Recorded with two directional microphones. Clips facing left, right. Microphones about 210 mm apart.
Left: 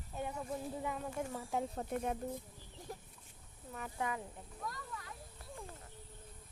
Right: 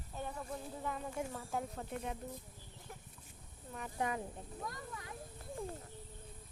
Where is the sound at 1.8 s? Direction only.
45° left (ahead or behind).